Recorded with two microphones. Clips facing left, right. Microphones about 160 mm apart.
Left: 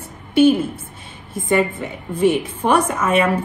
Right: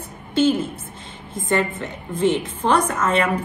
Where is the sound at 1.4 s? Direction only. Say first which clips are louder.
Left 4 dB; 10° left (ahead or behind).